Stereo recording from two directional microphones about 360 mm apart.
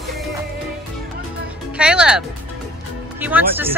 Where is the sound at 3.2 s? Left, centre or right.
Centre.